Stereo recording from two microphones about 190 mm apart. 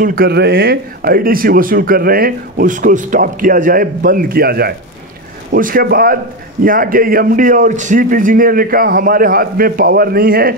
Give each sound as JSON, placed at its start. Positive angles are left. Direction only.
{"t": 0.0, "sound": "speech", "side_deg": -50}